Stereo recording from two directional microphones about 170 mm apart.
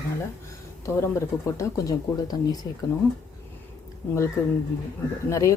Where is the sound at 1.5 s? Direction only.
20° left (ahead or behind).